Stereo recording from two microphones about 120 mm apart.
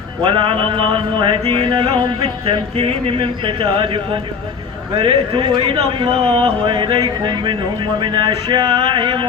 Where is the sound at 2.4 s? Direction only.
55° right (ahead or behind).